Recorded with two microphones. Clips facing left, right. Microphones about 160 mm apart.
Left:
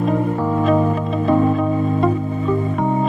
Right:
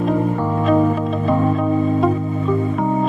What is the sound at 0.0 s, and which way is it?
Music, centre (ahead or behind).